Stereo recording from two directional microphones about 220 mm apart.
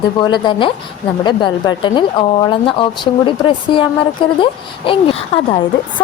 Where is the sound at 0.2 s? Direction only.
20° left (ahead or behind).